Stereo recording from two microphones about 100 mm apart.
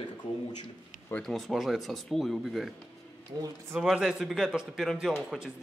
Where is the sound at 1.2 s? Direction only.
Centre (ahead or behind).